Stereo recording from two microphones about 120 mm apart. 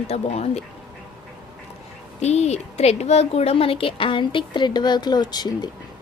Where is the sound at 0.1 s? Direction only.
60° left (ahead or behind).